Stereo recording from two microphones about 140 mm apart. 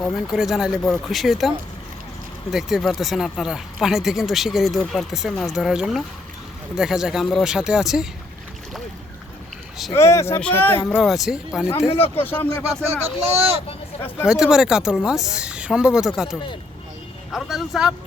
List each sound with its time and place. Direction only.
0.2 s speech: 5° right (ahead or behind)
9.9 s speech: 20° left (ahead or behind)
10.8 s speech: centre (ahead or behind)
11.9 s speech: 45° left (ahead or behind)
12.2 s speech: 15° left (ahead or behind)
12.9 s speech: 45° right (ahead or behind)
14.3 s speech: 5° right (ahead or behind)